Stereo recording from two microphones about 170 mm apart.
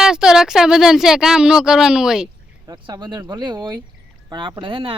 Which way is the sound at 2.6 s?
25° right (ahead or behind).